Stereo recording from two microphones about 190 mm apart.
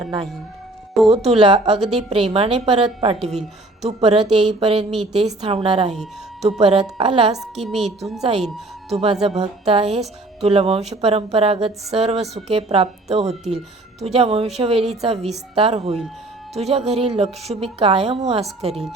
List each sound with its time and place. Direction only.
1.1 s a woman's voice: 35° right (ahead or behind)
7.3 s a woman's voice: centre (ahead or behind)
8.9 s a woman's voice: 30° right (ahead or behind)
18.7 s a woman's voice: centre (ahead or behind)